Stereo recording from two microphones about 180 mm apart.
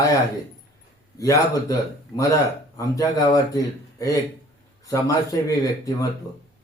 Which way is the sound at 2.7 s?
20° left (ahead or behind).